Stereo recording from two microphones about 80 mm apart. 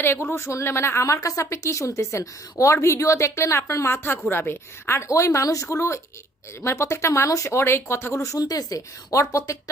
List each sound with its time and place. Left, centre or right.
0.0 s a woman's voice: left